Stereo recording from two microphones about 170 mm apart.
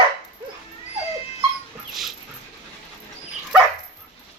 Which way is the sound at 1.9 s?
Centre (ahead or behind).